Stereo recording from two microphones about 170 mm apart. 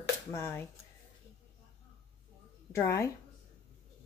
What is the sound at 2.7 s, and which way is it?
Speech, 15° left (ahead or behind).